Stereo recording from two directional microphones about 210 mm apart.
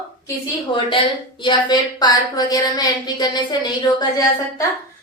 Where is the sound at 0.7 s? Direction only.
25° left (ahead or behind).